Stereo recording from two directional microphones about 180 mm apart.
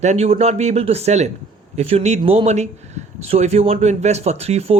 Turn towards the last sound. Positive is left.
turn(degrees=-35)  # may be behind; listen again after turning